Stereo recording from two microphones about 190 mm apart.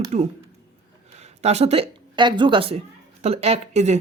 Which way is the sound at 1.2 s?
35° right (ahead or behind).